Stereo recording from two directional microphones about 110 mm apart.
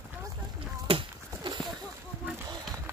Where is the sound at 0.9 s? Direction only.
55° right (ahead or behind).